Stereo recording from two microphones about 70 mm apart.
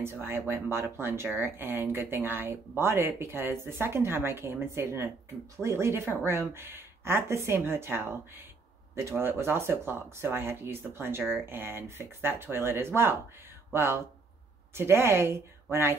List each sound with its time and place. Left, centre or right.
0.0 s speech: right